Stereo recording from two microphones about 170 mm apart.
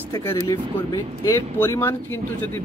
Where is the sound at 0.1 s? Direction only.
15° left (ahead or behind).